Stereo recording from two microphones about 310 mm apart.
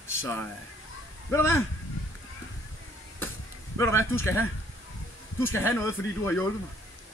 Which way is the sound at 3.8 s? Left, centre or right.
Centre.